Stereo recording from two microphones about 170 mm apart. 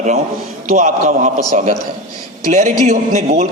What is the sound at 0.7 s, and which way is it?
A man's voice, 45° right (ahead or behind).